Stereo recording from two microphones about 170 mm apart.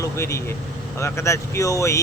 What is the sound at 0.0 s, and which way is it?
Speech, 15° left (ahead or behind).